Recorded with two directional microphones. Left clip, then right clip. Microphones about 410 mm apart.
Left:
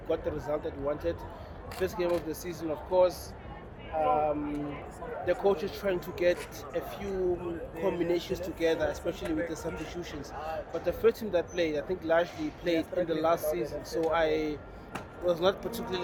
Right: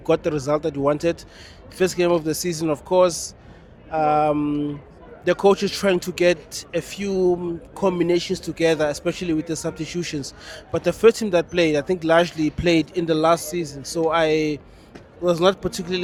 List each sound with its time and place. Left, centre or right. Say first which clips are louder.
0.1 s a man's voice: right 11 dB; right